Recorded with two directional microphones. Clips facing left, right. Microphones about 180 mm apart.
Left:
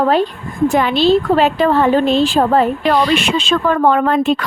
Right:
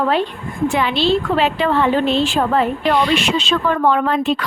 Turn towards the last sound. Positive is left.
turn(degrees=50)  # may be behind; listen again after turning